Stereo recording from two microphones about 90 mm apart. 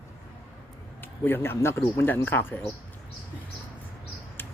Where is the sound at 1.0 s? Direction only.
25° left (ahead or behind).